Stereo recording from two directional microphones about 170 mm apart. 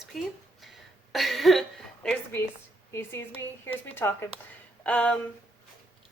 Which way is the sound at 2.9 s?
15° left (ahead or behind).